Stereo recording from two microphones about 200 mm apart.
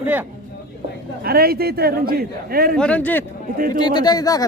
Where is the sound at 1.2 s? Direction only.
50° right (ahead or behind).